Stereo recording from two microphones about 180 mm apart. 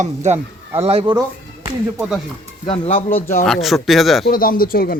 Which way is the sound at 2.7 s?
35° left (ahead or behind).